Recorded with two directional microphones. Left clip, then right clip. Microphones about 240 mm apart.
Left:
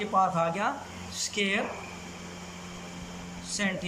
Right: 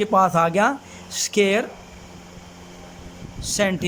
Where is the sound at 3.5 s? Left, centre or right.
Right.